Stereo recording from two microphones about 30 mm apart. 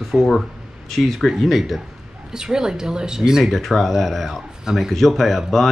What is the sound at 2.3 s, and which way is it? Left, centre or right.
Speech, right.